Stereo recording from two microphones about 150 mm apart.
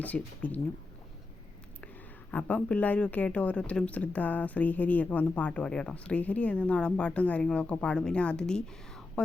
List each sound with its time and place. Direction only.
0.0 s speech: 10° left (ahead or behind)
2.3 s speech: 10° left (ahead or behind)